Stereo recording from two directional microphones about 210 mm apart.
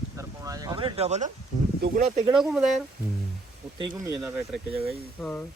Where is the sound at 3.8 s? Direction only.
15° right (ahead or behind).